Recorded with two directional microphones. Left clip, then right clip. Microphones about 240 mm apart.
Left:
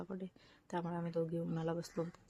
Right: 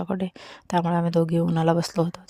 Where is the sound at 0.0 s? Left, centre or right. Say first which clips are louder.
Right 18 dB; right.